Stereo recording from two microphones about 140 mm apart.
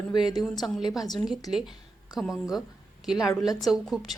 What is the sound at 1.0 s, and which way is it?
Speech, 30° left (ahead or behind).